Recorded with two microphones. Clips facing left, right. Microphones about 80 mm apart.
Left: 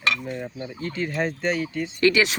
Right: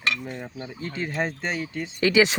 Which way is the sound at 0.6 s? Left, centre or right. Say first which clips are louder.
Left 1 dB; right.